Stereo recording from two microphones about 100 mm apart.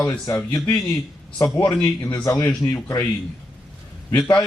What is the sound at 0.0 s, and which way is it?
Speech, 25° left (ahead or behind).